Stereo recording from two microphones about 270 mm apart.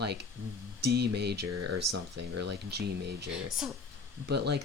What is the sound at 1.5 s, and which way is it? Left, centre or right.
Speech, right.